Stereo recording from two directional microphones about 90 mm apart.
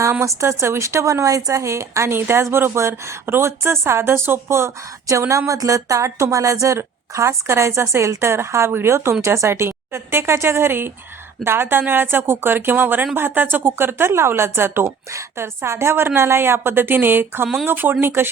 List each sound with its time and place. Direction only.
0.0 s a woman's voice: 30° right (ahead or behind)